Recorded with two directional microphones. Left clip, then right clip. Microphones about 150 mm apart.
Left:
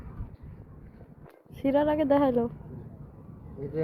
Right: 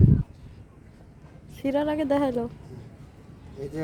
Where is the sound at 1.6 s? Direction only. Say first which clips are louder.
Left 1 dB; 5° right (ahead or behind).